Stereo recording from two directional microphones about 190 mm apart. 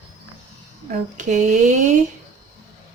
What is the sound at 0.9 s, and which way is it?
Speech, 40° right (ahead or behind).